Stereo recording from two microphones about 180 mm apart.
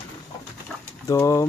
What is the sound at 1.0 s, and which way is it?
Speech, 15° left (ahead or behind).